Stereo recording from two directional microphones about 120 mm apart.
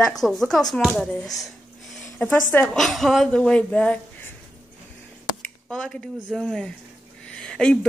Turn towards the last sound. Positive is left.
turn(degrees=5)  # may be behind; listen again after turning